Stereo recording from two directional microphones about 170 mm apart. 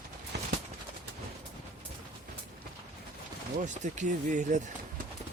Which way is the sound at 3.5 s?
45° right (ahead or behind).